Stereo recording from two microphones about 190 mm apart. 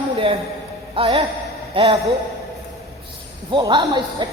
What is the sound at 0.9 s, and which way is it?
A man's voice, 30° right (ahead or behind).